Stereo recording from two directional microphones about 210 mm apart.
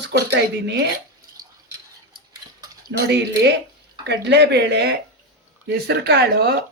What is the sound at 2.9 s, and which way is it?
Speech, 55° right (ahead or behind).